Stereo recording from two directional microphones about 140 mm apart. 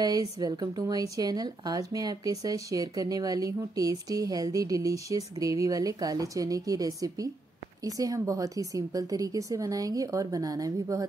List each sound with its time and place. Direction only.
0.0 s a woman's voice: 25° right (ahead or behind)